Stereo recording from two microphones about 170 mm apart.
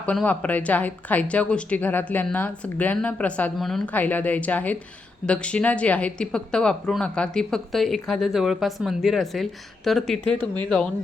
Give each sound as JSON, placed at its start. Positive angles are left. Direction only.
{"t": 0.0, "sound": "speech", "side_deg": 10}